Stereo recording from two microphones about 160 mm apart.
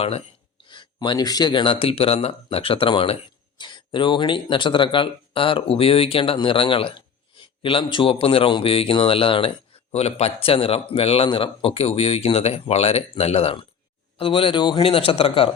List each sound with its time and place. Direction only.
0.6 s speech: 30° left (ahead or behind)